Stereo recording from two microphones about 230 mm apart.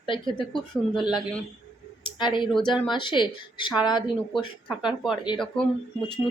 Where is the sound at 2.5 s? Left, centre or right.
Centre.